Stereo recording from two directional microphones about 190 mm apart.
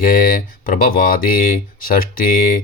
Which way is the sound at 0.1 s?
45° left (ahead or behind).